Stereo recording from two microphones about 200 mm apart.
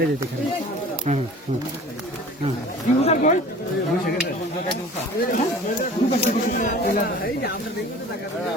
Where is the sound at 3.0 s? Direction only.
35° left (ahead or behind).